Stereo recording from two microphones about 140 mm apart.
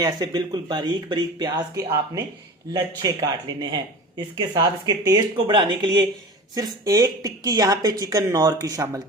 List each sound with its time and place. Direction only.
0.0 s speech: 30° right (ahead or behind)